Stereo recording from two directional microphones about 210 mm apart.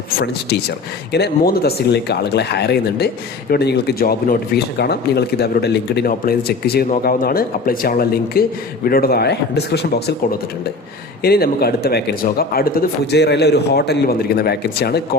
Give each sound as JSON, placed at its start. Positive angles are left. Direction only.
{"t": 1.1, "sound": "speech", "side_deg": 50}
{"t": 11.2, "sound": "speech", "side_deg": 50}